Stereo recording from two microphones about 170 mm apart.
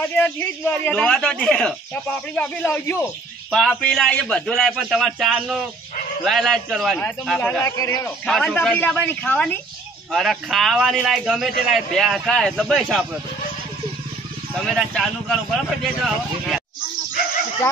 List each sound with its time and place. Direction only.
0.0 s a man's voice: 10° left (ahead or behind)
7.3 s a man's voice: 10° left (ahead or behind)
8.3 s a man's voice: centre (ahead or behind)
14.5 s a man's voice: centre (ahead or behind)